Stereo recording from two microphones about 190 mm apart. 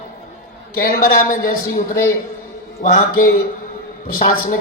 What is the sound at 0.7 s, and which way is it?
A woman's voice, 55° left (ahead or behind).